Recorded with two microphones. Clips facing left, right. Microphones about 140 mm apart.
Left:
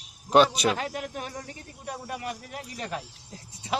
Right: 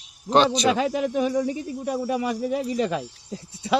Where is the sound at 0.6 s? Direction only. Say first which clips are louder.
Right 6 dB; 90° right.